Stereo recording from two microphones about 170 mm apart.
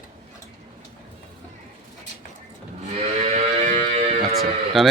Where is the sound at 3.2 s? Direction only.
40° right (ahead or behind).